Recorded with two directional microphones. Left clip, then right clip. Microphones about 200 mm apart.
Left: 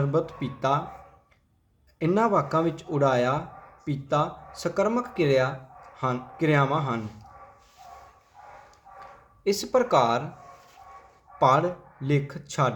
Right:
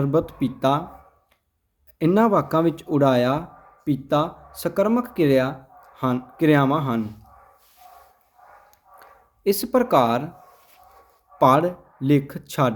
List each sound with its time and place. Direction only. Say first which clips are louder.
0.0 s speech: right 5 dB; 45° right (ahead or behind)
2.0 s speech: right 4 dB; 45° right (ahead or behind)
9.4 s speech: right 3 dB; 40° right (ahead or behind)
11.3 s speech: right 4 dB; 45° right (ahead or behind)